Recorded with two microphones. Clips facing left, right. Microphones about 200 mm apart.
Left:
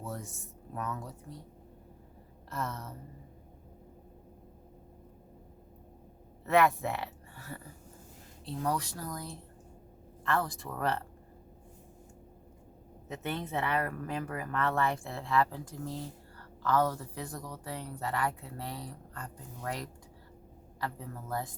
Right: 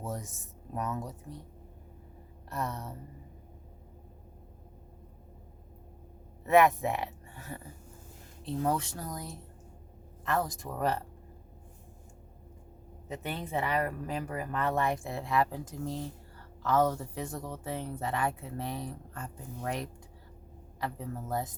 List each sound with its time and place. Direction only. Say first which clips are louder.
0.0 s speech: right 2 dB; 20° right (ahead or behind)
2.5 s speech: right 2 dB; 15° right (ahead or behind)
6.4 s speech: right 3 dB; 15° right (ahead or behind)
8.6 s speech: right 1 dB; 25° right (ahead or behind)
13.1 s speech: even; 15° right (ahead or behind)